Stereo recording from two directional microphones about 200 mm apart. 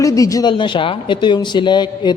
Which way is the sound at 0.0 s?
15° left (ahead or behind).